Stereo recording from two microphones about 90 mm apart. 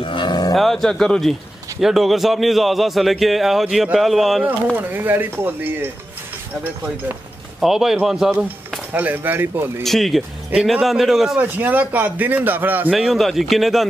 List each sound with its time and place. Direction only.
0.0 s cattle: 70° left (ahead or behind); by 0.6 s 50° left (ahead or behind)
0.6 s a man's voice: 5° left (ahead or behind)
4.7 s a man's voice: 20° right (ahead or behind)
7.6 s a man's voice: 5° right (ahead or behind)
8.9 s a man's voice: 20° right (ahead or behind)
9.8 s a man's voice: centre (ahead or behind)
11.3 s a man's voice: 20° right (ahead or behind)
12.9 s a man's voice: centre (ahead or behind)